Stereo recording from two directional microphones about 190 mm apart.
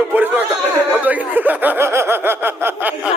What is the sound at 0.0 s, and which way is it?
Chatter, 10° right (ahead or behind).